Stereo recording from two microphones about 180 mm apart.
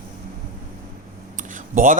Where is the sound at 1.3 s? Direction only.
45° right (ahead or behind).